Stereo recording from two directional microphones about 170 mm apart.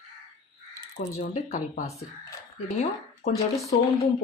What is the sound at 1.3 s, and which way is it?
Speech, 45° left (ahead or behind).